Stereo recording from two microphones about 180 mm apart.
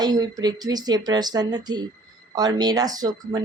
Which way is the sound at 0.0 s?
20° right (ahead or behind).